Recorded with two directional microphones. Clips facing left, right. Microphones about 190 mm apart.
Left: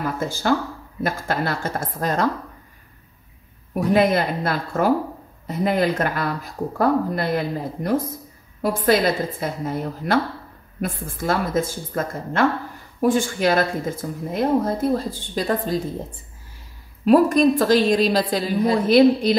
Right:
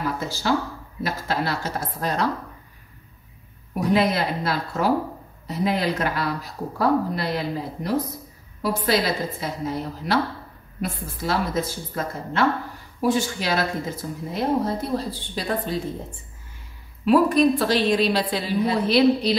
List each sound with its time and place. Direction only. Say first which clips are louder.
0.2 s speech: left 5 dB; 50° left (ahead or behind)
3.9 s speech: left 3 dB; 50° left (ahead or behind)
17.0 s speech: left 2 dB; 45° left (ahead or behind)